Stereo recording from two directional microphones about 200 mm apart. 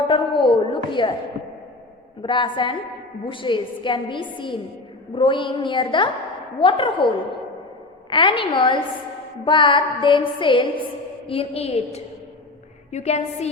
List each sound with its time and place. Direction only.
0.1 s a sound: 25° left (ahead or behind)
2.2 s music: 25° left (ahead or behind)
8.1 s music: 25° left (ahead or behind)
11.3 s a woman's voice: 30° left (ahead or behind)